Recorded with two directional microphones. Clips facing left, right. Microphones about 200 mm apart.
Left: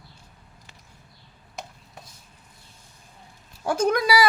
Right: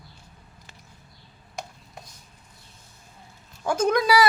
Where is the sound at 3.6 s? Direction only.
10° left (ahead or behind).